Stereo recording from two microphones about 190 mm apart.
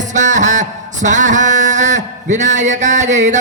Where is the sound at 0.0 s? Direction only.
40° right (ahead or behind).